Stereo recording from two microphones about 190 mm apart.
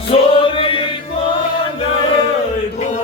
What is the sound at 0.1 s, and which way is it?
Music, 30° left (ahead or behind).